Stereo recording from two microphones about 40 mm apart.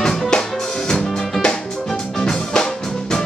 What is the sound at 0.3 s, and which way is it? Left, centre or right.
Music, centre.